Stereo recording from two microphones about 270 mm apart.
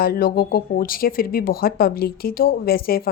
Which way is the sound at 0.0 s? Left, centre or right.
Left.